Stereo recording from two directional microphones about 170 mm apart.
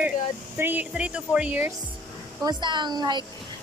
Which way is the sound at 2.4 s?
25° right (ahead or behind).